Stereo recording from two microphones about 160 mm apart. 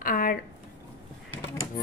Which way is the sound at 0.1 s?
60° left (ahead or behind).